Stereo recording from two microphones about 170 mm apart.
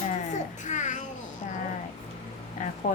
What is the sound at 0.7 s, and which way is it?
Babbling, 45° left (ahead or behind).